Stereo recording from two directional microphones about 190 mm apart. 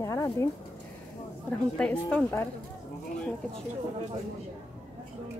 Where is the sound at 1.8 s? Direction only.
5° left (ahead or behind).